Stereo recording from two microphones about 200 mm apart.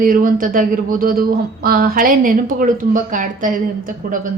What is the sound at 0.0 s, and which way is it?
Speech, 45° right (ahead or behind).